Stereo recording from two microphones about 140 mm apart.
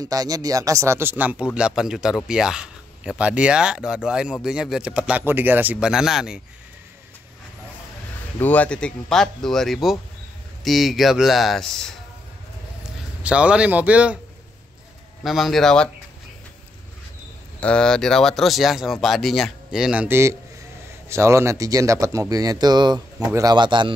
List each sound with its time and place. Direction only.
0.0 s speech: 25° right (ahead or behind); by 6.4 s 5° right (ahead or behind)
8.4 s speech: 10° left (ahead or behind)
13.2 s speech: 10° right (ahead or behind)
15.2 s speech: centre (ahead or behind)
17.6 s a man's voice: 5° left (ahead or behind); by 23.9 s 35° right (ahead or behind)